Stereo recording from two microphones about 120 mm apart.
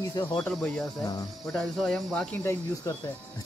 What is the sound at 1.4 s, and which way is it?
Cricket, 5° left (ahead or behind).